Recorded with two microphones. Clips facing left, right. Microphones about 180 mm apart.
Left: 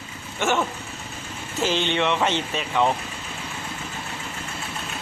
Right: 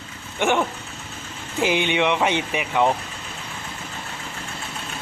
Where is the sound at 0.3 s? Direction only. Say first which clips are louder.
Right 2 dB; 15° right (ahead or behind).